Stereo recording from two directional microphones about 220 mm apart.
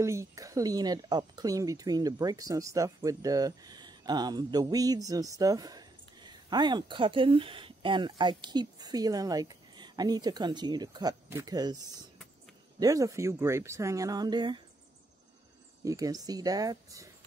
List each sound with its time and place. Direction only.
0.0 s speech: 15° right (ahead or behind)
15.8 s speech: 15° right (ahead or behind)